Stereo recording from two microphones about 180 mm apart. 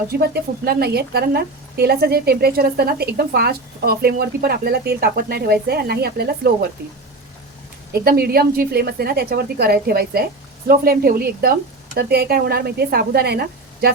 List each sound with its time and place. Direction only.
0.1 s speech: 55° right (ahead or behind)
8.0 s speech: 60° right (ahead or behind)